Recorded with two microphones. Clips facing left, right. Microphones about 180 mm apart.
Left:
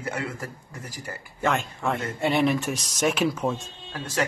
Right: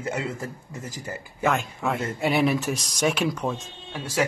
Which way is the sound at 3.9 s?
10° right (ahead or behind).